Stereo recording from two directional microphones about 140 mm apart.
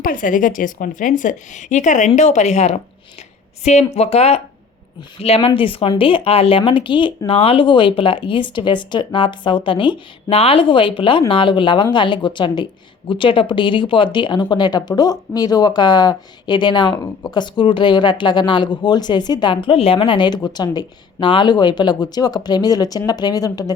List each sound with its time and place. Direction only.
0.0 s a woman's voice: 75° left (ahead or behind); by 23.7 s 25° left (ahead or behind)